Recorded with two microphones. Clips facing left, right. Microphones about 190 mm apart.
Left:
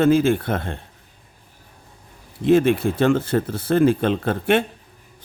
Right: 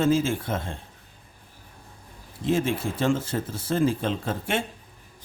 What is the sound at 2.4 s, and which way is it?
Speech, 65° left (ahead or behind).